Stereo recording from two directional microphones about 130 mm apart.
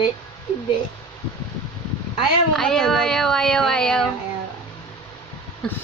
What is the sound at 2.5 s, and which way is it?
Speech, 5° left (ahead or behind).